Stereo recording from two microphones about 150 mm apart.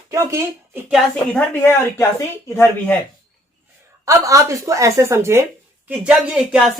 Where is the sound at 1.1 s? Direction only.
10° left (ahead or behind).